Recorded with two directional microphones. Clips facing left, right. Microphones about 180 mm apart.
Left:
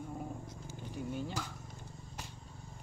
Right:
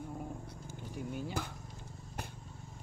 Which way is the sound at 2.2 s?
55° right (ahead or behind).